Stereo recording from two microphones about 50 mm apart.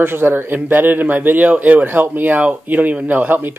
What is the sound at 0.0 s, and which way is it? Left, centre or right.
Speech, right.